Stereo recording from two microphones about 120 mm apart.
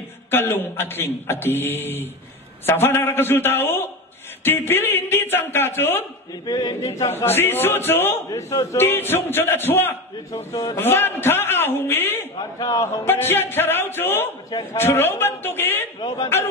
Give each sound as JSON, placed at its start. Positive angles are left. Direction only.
{"t": 0.3, "sound": "a man's voice", "side_deg": 20}
{"t": 6.4, "sound": "a man's voice", "side_deg": 35}
{"t": 7.2, "sound": "a man's voice", "side_deg": 20}
{"t": 12.4, "sound": "a man's voice", "side_deg": 35}
{"t": 13.0, "sound": "a man's voice", "side_deg": 20}
{"t": 16.0, "sound": "a man's voice", "side_deg": 40}